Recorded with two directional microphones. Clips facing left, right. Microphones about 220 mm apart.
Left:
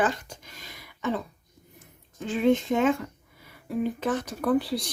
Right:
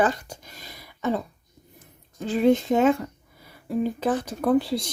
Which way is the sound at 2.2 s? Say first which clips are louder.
Right 3 dB; 40° right (ahead or behind).